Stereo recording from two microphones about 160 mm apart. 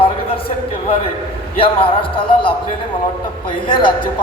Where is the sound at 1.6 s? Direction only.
35° left (ahead or behind).